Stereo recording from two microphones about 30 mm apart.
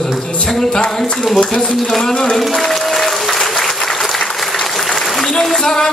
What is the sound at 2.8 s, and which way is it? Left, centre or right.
Applause, centre.